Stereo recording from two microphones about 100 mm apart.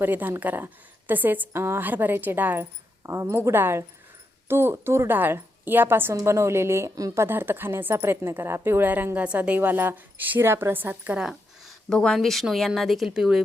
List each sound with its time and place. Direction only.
0.0 s a woman's voice: 20° right (ahead or behind)
11.2 s speech: centre (ahead or behind)